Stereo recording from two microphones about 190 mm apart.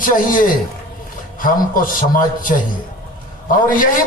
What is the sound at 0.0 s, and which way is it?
A man's voice, 45° left (ahead or behind).